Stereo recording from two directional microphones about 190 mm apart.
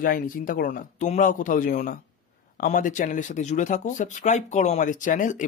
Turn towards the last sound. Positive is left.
turn(degrees=45)  # may be behind; listen again after turning